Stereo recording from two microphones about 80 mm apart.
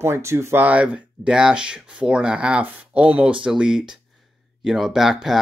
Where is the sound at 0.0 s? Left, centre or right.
Right.